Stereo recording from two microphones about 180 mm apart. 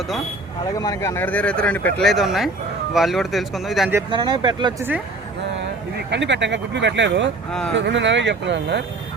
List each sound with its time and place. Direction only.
0.8 s speech: 20° left (ahead or behind); by 3.9 s centre (ahead or behind)
4.1 s speech: 25° right (ahead or behind)
4.8 s speech: 10° right (ahead or behind)
6.1 s speech: 80° right